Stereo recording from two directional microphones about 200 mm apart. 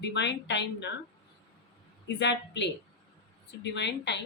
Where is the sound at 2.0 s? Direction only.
60° left (ahead or behind).